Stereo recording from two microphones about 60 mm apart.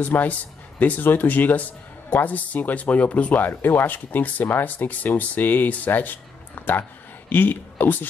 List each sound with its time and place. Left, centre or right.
0.0 s speech: left